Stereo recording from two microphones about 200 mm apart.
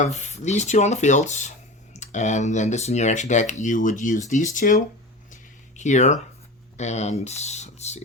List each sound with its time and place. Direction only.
0.0 s speech: 35° left (ahead or behind)
5.3 s a sound: 35° left (ahead or behind)
6.7 s speech: 35° left (ahead or behind)